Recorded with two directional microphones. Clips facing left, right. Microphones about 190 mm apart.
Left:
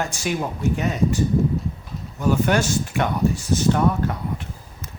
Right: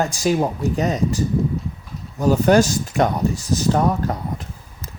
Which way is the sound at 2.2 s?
35° right (ahead or behind).